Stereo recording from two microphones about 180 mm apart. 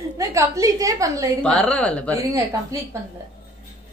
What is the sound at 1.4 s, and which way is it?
Speech, 5° left (ahead or behind).